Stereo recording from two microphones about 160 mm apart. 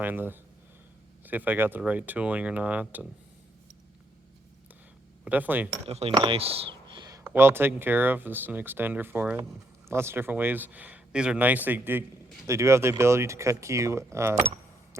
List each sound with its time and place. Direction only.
0.0 s speech: 10° right (ahead or behind)
5.2 s speech: 10° right (ahead or behind)
5.8 s mechanisms: 40° right (ahead or behind)
6.1 s a sound: 35° right (ahead or behind)
7.3 s speech: 15° right (ahead or behind)